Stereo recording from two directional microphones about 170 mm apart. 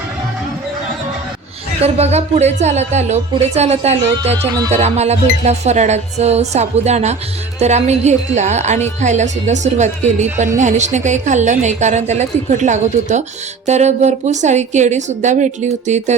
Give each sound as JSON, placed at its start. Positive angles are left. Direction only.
{"t": 1.8, "sound": "music", "side_deg": -40}
{"t": 7.6, "sound": "a woman's voice", "side_deg": -40}